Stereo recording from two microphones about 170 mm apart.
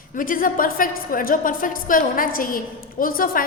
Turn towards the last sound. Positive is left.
turn(degrees=55)  # may be behind; listen again after turning